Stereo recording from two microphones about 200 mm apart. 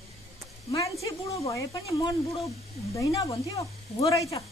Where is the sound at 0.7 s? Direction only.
15° left (ahead or behind).